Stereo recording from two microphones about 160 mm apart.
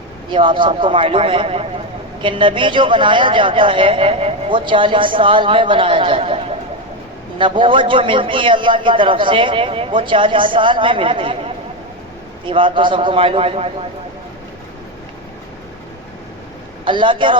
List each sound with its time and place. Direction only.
0.3 s a woman's voice: 30° right (ahead or behind)
16.8 s a woman's voice: 30° right (ahead or behind)